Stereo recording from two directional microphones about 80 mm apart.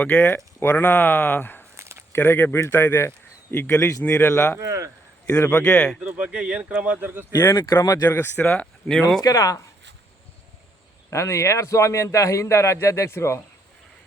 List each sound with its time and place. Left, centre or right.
0.0 s speech: centre
1.7 s a sound: right
2.1 s a man's voice: left
4.6 s speech: right
5.5 s speech: centre
6.0 s speech: centre
7.5 s speech: left
8.1 s speech: left
8.4 s speech: centre
9.2 s speech: left
11.1 s a man's voice: left